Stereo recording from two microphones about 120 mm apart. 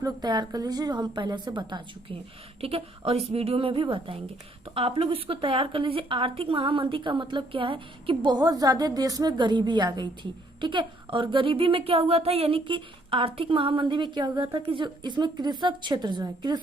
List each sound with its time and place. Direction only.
0.0 s a woman's voice: 35° right (ahead or behind)
2.6 s speech: 55° right (ahead or behind); by 16.6 s 35° right (ahead or behind)